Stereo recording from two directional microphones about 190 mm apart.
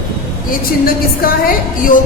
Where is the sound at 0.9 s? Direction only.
50° left (ahead or behind).